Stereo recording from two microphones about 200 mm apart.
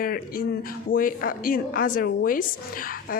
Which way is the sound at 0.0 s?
45° left (ahead or behind).